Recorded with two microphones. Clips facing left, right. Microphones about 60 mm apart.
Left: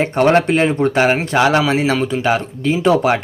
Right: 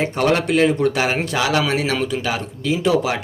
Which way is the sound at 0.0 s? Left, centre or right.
Left.